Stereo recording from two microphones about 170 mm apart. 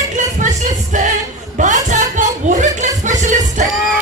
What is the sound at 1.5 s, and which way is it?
Music, 45° right (ahead or behind).